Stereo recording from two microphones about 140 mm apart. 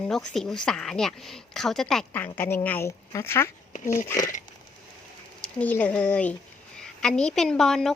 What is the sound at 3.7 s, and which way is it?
Speech, 65° left (ahead or behind).